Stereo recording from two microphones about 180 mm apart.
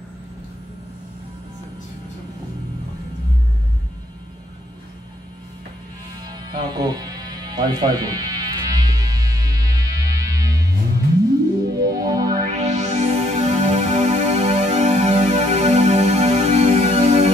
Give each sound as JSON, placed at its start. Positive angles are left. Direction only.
{"t": 6.2, "sound": "music", "side_deg": -20}
{"t": 12.5, "sound": "music", "side_deg": -40}